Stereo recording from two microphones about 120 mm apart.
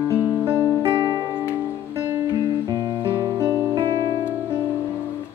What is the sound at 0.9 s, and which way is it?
Music, 35° right (ahead or behind).